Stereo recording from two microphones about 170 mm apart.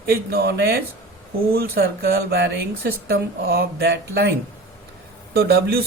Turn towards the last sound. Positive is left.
turn(degrees=-70)  # may be behind; listen again after turning